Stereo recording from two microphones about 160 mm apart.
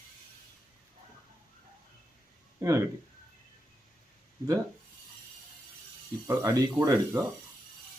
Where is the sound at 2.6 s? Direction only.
20° right (ahead or behind).